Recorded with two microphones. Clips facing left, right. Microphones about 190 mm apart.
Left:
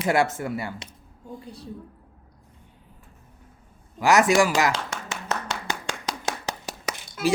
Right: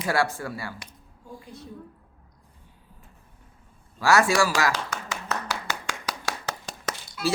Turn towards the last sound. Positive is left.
turn(degrees=10)  # may be behind; listen again after turning